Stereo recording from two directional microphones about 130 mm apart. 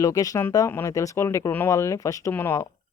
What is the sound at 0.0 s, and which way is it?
Speech, 30° left (ahead or behind).